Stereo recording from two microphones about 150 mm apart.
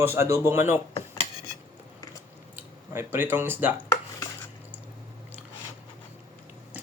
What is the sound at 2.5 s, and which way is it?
Speech, 15° right (ahead or behind).